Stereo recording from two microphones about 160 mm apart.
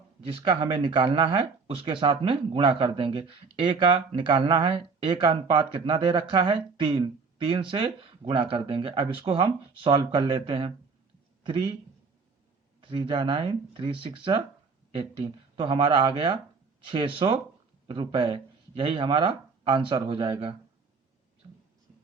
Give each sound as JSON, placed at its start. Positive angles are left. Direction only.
{"t": 0.3, "sound": "speech", "side_deg": -35}
{"t": 12.8, "sound": "speech", "side_deg": -35}
{"t": 21.4, "sound": "a sound", "side_deg": -30}